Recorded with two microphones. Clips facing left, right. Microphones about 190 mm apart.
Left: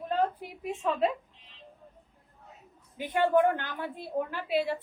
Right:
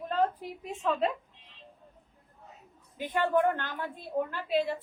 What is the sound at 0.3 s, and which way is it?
Speech, 10° left (ahead or behind).